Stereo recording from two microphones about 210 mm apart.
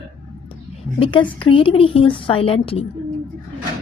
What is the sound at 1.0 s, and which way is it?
A woman's voice, 25° left (ahead or behind).